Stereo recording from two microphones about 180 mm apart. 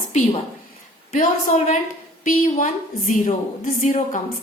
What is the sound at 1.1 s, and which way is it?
Speech, 40° left (ahead or behind).